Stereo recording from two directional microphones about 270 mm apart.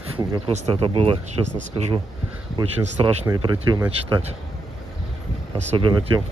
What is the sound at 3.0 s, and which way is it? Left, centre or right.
Speech, centre.